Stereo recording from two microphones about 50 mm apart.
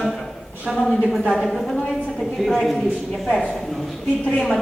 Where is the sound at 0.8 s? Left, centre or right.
Centre.